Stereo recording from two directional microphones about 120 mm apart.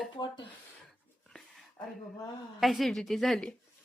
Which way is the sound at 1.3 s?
5° left (ahead or behind).